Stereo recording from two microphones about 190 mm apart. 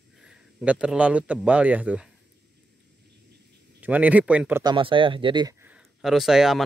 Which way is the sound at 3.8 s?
10° right (ahead or behind).